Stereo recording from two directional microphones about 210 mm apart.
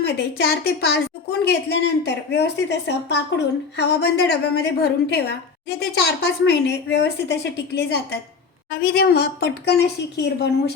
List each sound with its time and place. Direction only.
0.0 s a woman's voice: 50° left (ahead or behind)